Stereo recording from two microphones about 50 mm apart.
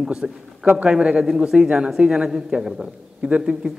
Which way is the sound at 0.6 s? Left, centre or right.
Right.